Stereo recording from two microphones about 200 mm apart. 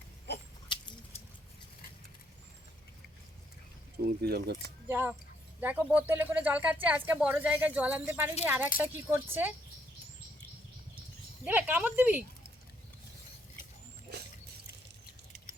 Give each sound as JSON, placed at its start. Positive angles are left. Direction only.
{"t": 0.7, "sound": "a sound", "side_deg": 25}
{"t": 4.0, "sound": "speech", "side_deg": -50}
{"t": 4.9, "sound": "speech", "side_deg": -10}
{"t": 11.4, "sound": "speech", "side_deg": -5}